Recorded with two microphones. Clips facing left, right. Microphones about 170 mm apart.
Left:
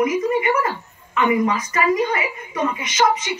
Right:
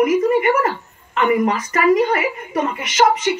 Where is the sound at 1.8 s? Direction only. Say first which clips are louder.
Right 5 dB; 50° right (ahead or behind).